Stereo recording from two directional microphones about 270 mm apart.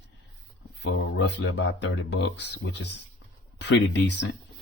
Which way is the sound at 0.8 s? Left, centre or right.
Left.